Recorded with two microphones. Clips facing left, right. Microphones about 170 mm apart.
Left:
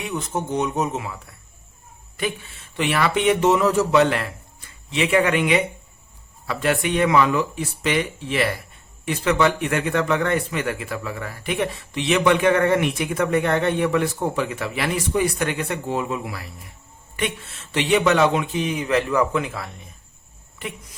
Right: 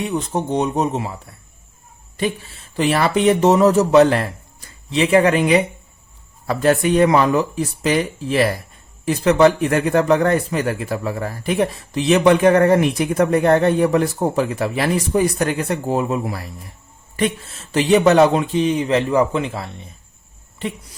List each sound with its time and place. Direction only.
0.0 s speech: 35° right (ahead or behind)